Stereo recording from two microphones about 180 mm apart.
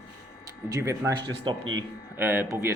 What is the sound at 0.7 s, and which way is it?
Speech, 15° right (ahead or behind).